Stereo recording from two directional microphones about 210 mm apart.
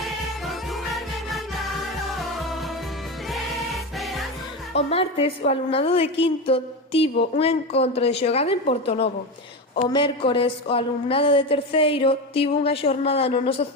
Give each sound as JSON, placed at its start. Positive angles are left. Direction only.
{"t": 0.0, "sound": "music", "side_deg": 0}
{"t": 3.9, "sound": "music", "side_deg": 0}
{"t": 4.9, "sound": "a woman's voice", "side_deg": 25}